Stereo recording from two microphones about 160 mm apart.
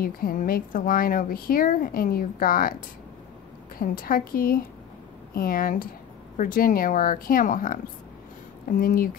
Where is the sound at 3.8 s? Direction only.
60° left (ahead or behind).